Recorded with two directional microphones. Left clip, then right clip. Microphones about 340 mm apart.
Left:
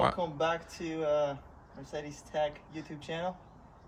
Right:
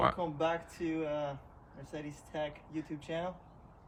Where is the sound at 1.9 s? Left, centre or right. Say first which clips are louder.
Left 5 dB; centre.